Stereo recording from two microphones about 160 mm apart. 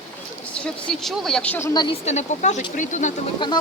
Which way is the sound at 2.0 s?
45° left (ahead or behind).